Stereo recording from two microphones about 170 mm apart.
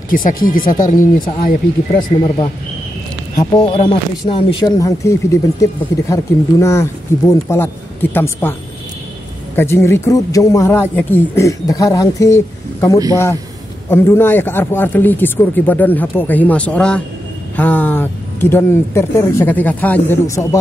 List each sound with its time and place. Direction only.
0.1 s speech: 55° left (ahead or behind)
2.2 s speech: 30° left (ahead or behind)
4.7 s speech: 20° left (ahead or behind)
9.6 s speech: 15° left (ahead or behind)